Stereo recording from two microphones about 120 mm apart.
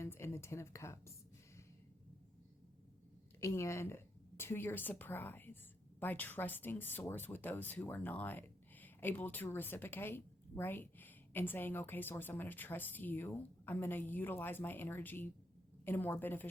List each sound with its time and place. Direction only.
0.0 s speech: 20° left (ahead or behind)
3.4 s speech: 25° left (ahead or behind)